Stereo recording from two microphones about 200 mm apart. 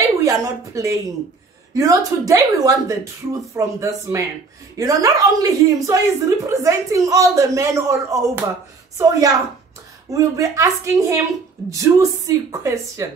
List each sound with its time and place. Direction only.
0.2 s a woman's voice: 15° right (ahead or behind)